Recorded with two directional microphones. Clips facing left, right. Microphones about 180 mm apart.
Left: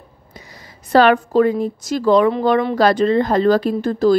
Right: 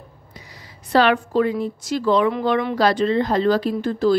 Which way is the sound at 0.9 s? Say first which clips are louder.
Left 4 dB; 45° left (ahead or behind).